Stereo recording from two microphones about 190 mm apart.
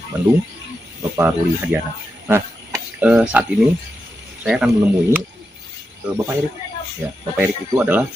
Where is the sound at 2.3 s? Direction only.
10° right (ahead or behind).